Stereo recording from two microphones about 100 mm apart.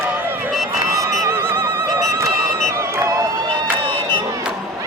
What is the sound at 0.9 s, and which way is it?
Neigh, 30° right (ahead or behind).